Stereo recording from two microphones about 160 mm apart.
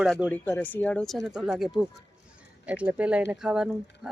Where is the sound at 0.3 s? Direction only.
10° left (ahead or behind).